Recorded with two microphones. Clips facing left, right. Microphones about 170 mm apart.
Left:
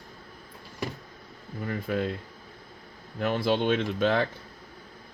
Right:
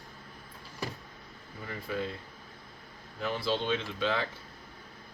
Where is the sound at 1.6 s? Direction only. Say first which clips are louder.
Left 6 dB; 55° left (ahead or behind).